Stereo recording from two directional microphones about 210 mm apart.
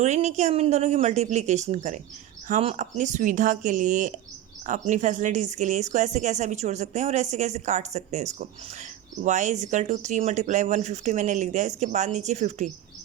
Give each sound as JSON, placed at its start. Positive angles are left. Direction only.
{"t": 0.0, "sound": "a woman's voice", "side_deg": -35}